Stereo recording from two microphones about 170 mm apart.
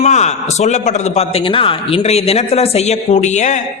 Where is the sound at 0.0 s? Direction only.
40° left (ahead or behind).